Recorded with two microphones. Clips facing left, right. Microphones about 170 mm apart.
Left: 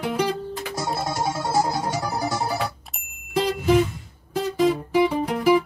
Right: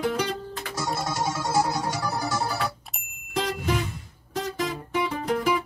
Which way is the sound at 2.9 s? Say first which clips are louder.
Even; centre (ahead or behind).